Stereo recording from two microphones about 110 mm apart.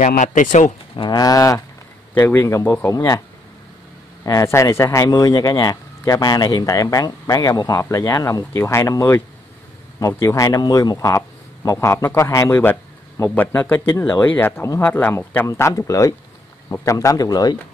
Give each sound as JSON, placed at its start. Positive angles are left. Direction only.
{"t": 0.9, "sound": "speech", "side_deg": 40}
{"t": 2.1, "sound": "a man's voice", "side_deg": 20}
{"t": 4.2, "sound": "a man's voice", "side_deg": 30}